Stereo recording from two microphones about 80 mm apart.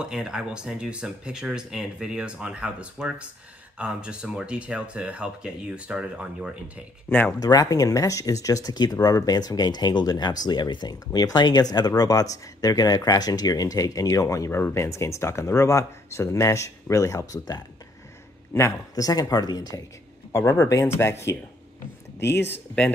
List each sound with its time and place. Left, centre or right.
0.0 s speech: centre
7.1 s speech: left
7.3 s speech: left
18.9 s speech: left
20.3 s speech: left